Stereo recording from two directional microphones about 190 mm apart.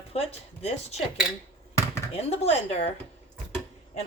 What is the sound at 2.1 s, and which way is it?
Speech, 35° left (ahead or behind).